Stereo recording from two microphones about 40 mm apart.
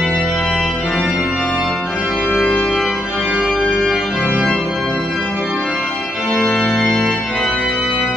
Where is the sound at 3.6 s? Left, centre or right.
Left.